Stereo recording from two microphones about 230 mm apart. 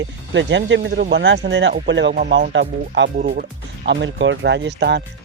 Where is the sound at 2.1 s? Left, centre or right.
Right.